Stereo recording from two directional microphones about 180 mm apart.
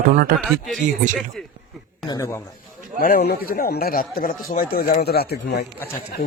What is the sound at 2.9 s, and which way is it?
A man's voice, 55° left (ahead or behind).